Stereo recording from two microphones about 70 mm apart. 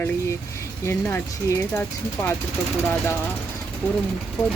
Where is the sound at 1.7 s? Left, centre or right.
Left.